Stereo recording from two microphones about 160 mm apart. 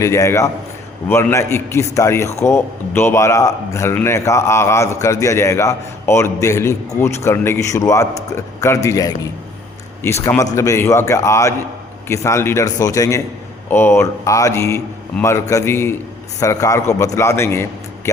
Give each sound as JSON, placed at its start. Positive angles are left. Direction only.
{"t": 0.0, "sound": "a man's voice", "side_deg": 15}